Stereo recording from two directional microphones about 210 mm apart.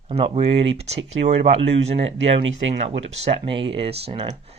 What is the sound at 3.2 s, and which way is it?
Speech, 25° right (ahead or behind).